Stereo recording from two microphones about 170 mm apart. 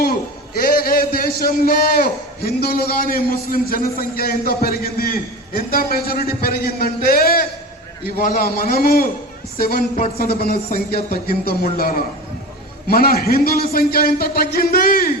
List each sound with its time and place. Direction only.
0.6 s a man's voice: 60° left (ahead or behind)
10.2 s a man's voice: 60° left (ahead or behind)